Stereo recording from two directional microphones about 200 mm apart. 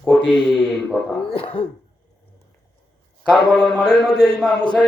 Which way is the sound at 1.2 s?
30° left (ahead or behind).